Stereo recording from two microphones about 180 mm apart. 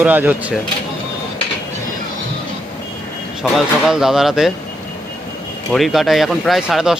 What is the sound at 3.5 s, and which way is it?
Speech, centre (ahead or behind).